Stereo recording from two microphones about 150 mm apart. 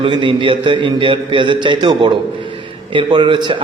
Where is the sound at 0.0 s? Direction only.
35° right (ahead or behind).